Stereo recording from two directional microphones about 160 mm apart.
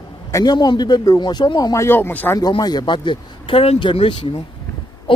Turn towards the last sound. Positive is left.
turn(degrees=35)  # may be behind; listen again after turning